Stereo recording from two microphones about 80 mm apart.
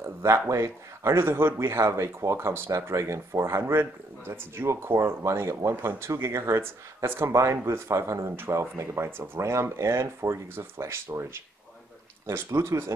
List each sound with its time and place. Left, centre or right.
0.0 s a sound: right
0.5 s speech: right
12.4 s speech: right